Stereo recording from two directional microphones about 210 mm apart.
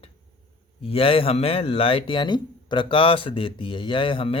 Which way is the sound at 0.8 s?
25° left (ahead or behind).